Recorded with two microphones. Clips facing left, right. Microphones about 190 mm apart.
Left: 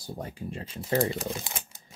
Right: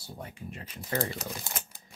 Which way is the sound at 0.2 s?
30° left (ahead or behind).